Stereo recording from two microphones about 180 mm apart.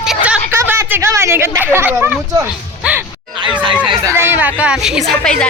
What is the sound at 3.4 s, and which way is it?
Chatter, 25° right (ahead or behind).